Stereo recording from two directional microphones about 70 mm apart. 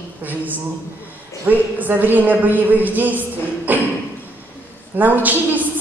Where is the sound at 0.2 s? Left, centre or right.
Right.